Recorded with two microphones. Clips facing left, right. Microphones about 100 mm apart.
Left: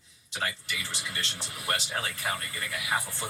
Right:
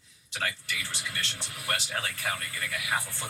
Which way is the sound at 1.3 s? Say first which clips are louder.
Left 3 dB; 20° left (ahead or behind).